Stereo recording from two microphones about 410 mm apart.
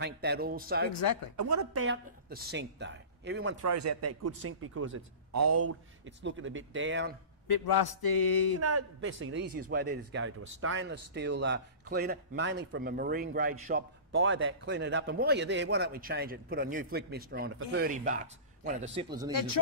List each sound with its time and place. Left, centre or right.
0.0 s speech: right
0.9 s a man's voice: left
1.3 s speech: right
3.6 s speech: right
7.4 s a man's voice: left
8.5 s speech: right; by 19.3 s centre